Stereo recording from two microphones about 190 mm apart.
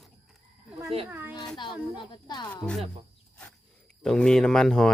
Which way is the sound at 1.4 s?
25° left (ahead or behind).